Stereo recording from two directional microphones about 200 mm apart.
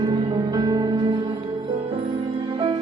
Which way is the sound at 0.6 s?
20° right (ahead or behind).